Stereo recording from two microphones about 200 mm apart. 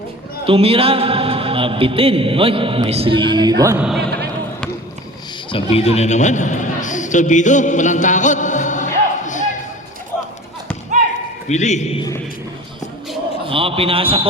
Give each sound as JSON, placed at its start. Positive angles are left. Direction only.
{"t": 0.4, "sound": "a man's voice", "side_deg": -30}
{"t": 3.8, "sound": "a man's voice", "side_deg": 0}
{"t": 5.7, "sound": "a sound", "side_deg": 30}
{"t": 11.4, "sound": "a man's voice", "side_deg": 35}
{"t": 13.5, "sound": "a man's voice", "side_deg": -25}